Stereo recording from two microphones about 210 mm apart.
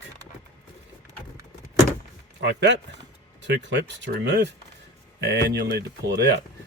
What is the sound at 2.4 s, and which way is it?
Speech, 55° right (ahead or behind).